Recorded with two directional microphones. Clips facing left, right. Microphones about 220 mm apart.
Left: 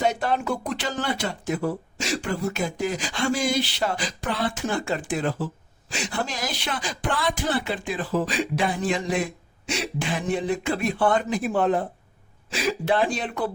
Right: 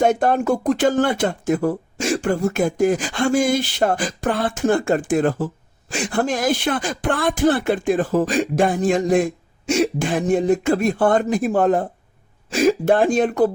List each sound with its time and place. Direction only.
0.0 s speech: 50° right (ahead or behind)